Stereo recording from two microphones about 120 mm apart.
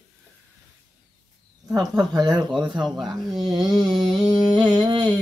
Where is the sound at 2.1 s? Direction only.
35° right (ahead or behind).